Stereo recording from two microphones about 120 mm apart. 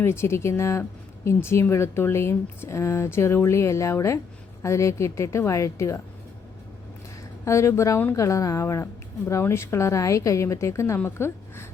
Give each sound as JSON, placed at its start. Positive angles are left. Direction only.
{"t": 0.0, "sound": "a woman's voice", "side_deg": 20}
{"t": 7.4, "sound": "a woman's voice", "side_deg": 25}